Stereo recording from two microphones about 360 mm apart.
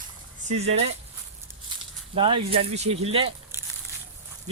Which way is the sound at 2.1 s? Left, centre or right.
Centre.